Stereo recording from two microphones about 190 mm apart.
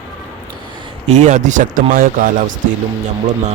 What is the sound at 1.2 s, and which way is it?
Speech, 40° right (ahead or behind).